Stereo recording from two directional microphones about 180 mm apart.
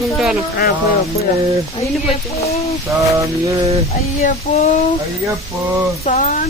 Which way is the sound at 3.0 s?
20° right (ahead or behind).